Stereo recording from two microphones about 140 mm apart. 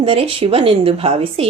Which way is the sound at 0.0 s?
40° right (ahead or behind).